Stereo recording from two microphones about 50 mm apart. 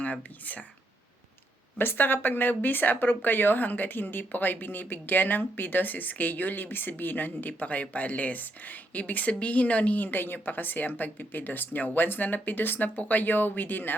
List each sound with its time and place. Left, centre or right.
0.0 s speech: left
1.8 s speech: left